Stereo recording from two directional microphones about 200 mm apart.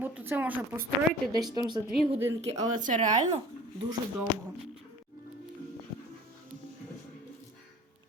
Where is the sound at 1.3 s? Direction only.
20° right (ahead or behind).